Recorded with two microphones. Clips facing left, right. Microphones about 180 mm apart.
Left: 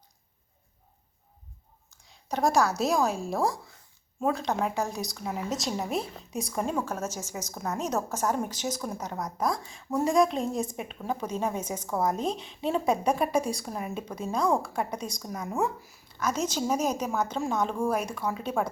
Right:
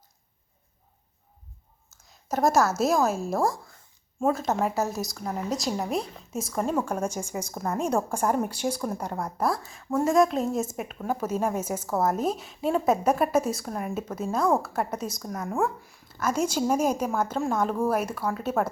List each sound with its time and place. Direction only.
2.0 s a woman's voice: 5° right (ahead or behind)
6.8 s speech: 15° right (ahead or behind)